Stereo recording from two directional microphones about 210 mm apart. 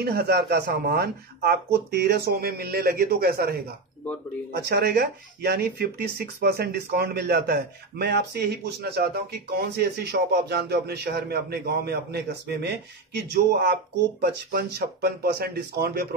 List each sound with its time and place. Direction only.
0.0 s speech: 50° right (ahead or behind)